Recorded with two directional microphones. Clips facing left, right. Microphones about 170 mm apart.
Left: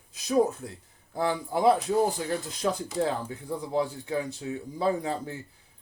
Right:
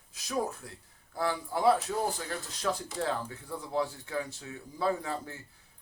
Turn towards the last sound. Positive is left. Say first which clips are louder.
# left 4 dB
turn(degrees=20)  # may be behind; listen again after turning